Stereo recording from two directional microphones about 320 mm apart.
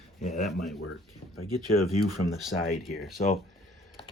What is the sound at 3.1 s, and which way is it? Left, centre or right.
Speech, centre.